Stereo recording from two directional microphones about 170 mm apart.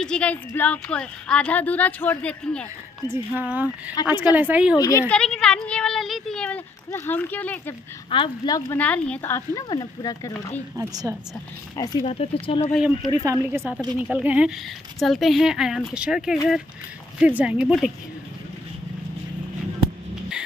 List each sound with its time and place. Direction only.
0.0 s speech: 5° left (ahead or behind)
3.1 s speech: 10° right (ahead or behind)
4.7 s speech: 20° left (ahead or behind)
5.1 s a sound: 5° left (ahead or behind)
6.9 s speech: 10° left (ahead or behind)
8.1 s speech: 25° left (ahead or behind)
8.7 s speech: 5° left (ahead or behind)
10.8 s a woman's voice: 20° right (ahead or behind)
11.7 s speech: 25° left (ahead or behind)
12.0 s speech: 35° left (ahead or behind)
12.7 s a woman's voice: centre (ahead or behind)
13.1 s a woman's voice: 20° right (ahead or behind); by 17.9 s 5° right (ahead or behind)